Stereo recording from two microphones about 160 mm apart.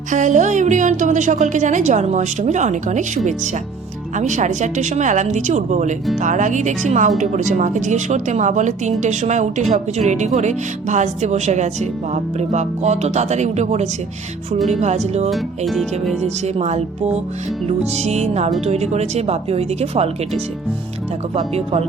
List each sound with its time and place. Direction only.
0.1 s a woman's voice: 50° right (ahead or behind)
4.1 s a woman's voice: 50° right (ahead or behind)
15.3 s music: centre (ahead or behind)
16.2 s a woman's voice: 45° right (ahead or behind)